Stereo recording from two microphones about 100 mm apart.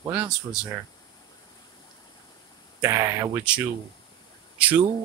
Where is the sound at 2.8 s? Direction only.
30° right (ahead or behind).